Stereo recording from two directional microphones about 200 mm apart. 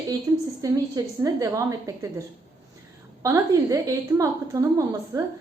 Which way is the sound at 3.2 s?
15° right (ahead or behind).